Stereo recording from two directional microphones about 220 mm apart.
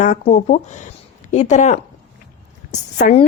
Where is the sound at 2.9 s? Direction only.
30° left (ahead or behind).